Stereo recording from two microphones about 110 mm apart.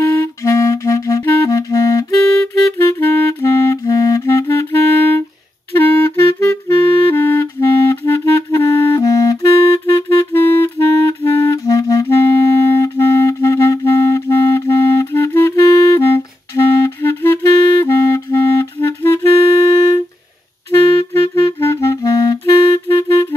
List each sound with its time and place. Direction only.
0.0 s clarinet: 25° left (ahead or behind)
2.9 s clarinet: 20° left (ahead or behind)
21.1 s clarinet: 25° left (ahead or behind)